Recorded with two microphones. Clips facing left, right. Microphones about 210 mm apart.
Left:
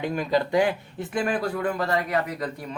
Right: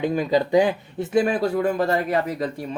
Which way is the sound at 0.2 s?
20° right (ahead or behind).